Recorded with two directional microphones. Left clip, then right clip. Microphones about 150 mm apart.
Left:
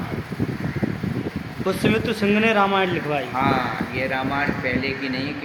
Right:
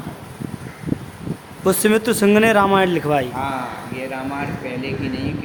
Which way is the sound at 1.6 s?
70° right (ahead or behind).